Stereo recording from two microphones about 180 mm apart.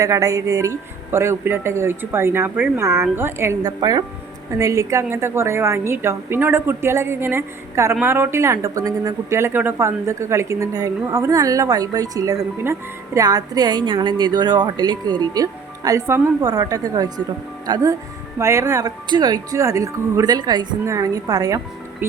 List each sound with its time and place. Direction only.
0.0 s speech: 20° right (ahead or behind)